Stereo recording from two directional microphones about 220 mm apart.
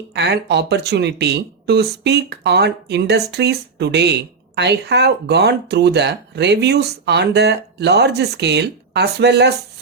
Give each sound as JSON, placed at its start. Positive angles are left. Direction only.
{"t": 0.1, "sound": "speech", "side_deg": -50}